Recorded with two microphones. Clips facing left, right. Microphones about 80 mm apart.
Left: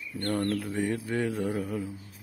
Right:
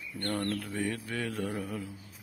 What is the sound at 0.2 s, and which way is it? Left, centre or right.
Mantra, centre.